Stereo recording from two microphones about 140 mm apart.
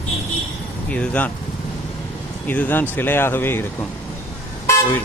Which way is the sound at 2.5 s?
15° left (ahead or behind).